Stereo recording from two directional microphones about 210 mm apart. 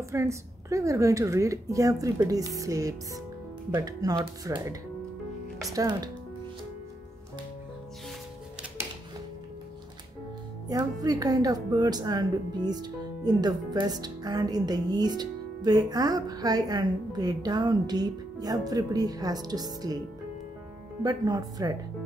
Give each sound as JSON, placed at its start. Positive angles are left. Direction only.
{"t": 0.1, "sound": "a woman's voice", "side_deg": -15}
{"t": 10.7, "sound": "a woman's voice", "side_deg": -15}
{"t": 21.0, "sound": "a woman's voice", "side_deg": -20}